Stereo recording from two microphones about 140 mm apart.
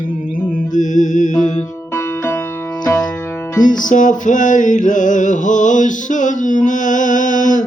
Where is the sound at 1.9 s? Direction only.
15° left (ahead or behind).